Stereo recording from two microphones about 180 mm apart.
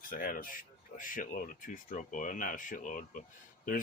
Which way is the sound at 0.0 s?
50° left (ahead or behind).